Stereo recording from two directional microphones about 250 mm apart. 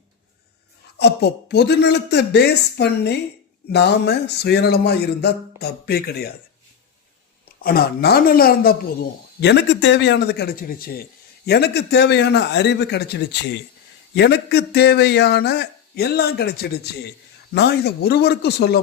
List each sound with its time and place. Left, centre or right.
0.9 s a man's voice: left
7.4 s a man's voice: left